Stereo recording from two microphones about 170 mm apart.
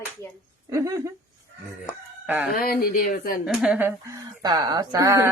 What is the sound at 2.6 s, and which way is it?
Speech, 60° left (ahead or behind).